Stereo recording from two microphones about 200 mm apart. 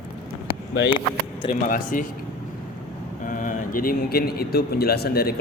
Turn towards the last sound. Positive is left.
turn(degrees=50)  # may be behind; listen again after turning